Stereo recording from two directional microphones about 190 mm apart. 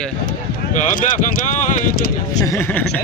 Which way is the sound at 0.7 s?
45° left (ahead or behind).